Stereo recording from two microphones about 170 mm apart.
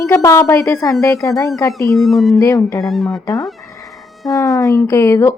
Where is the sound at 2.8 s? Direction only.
Centre (ahead or behind).